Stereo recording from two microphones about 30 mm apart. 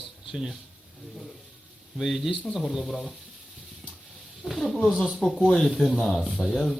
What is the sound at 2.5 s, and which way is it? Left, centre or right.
Speech, centre.